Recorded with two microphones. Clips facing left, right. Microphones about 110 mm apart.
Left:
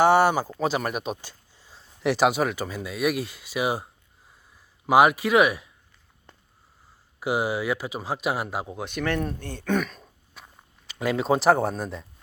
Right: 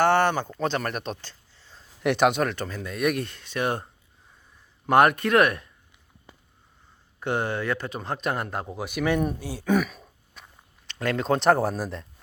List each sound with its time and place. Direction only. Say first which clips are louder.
0.0 s speech: left 2 dB; 10° left (ahead or behind)
4.9 s speech: left 1 dB; 5° left (ahead or behind)
6.3 s sniff: right 2 dB; 10° right (ahead or behind)
7.2 s speech: left 1 dB; 5° left (ahead or behind)
10.8 s speech: left 1 dB; 5° left (ahead or behind)